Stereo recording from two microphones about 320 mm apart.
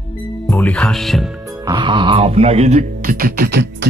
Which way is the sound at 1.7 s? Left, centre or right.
Centre.